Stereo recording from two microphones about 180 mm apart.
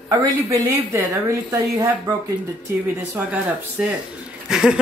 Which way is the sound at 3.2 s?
10° right (ahead or behind).